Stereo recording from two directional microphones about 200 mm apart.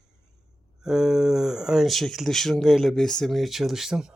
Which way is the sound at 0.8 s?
Centre (ahead or behind).